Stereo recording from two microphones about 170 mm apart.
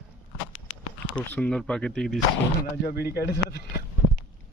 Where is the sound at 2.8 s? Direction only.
65° left (ahead or behind).